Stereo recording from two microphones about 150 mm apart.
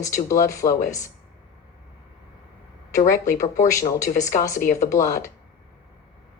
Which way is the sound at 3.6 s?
20° left (ahead or behind).